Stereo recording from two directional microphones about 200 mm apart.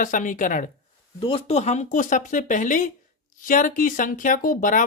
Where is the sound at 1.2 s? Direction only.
25° left (ahead or behind).